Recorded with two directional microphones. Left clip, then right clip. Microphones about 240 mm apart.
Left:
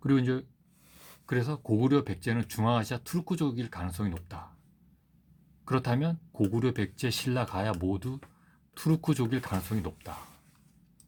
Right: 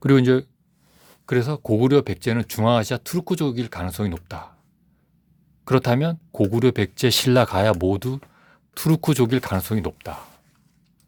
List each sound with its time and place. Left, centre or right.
0.0 s speech: right
5.6 s speech: right